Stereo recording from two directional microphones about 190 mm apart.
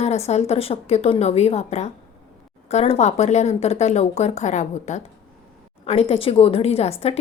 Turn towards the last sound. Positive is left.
turn(degrees=35)  # may be behind; listen again after turning